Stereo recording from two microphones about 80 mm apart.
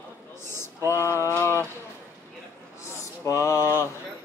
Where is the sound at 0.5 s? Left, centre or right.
Left.